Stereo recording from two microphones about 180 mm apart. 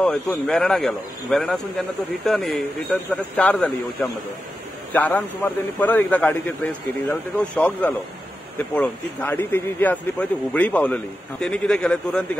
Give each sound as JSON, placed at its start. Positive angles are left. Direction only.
{"t": 0.0, "sound": "a man's voice", "side_deg": 5}